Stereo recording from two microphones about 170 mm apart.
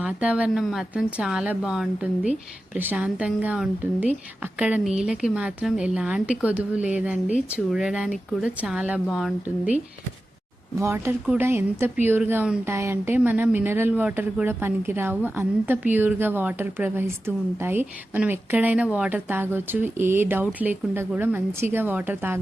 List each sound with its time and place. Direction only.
0.0 s speech: 5° right (ahead or behind)
10.8 s speech: 15° right (ahead or behind)